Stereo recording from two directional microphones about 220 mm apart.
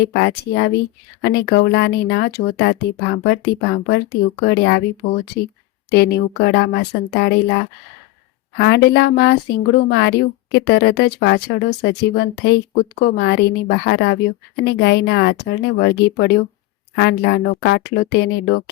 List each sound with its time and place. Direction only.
0.0 s a woman's voice: 50° left (ahead or behind)
5.9 s a woman's voice: 50° left (ahead or behind)
8.5 s a woman's voice: 50° left (ahead or behind)